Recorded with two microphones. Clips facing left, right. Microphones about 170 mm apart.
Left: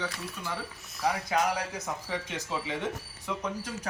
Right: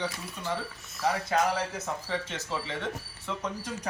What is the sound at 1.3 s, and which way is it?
Speech, 10° left (ahead or behind).